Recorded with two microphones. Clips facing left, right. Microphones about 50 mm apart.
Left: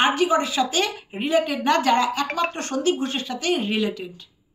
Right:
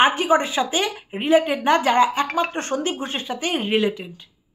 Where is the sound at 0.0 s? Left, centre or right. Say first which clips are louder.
Right 2 dB; right.